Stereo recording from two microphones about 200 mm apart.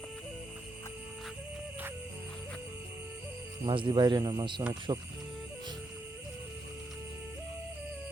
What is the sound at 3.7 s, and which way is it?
Speech, 25° right (ahead or behind).